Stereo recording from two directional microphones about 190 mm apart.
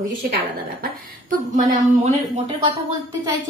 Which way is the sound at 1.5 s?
40° right (ahead or behind).